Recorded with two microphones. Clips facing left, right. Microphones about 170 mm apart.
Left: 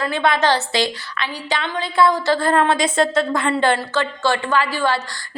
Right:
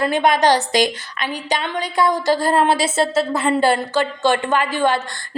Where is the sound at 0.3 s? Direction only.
15° right (ahead or behind).